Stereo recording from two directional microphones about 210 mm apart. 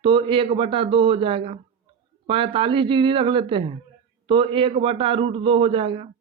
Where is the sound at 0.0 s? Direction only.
25° right (ahead or behind).